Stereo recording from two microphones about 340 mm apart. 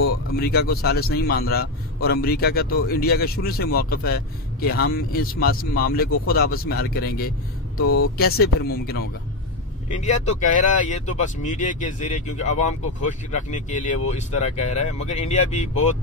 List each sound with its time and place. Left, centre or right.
0.0 s a man's voice: left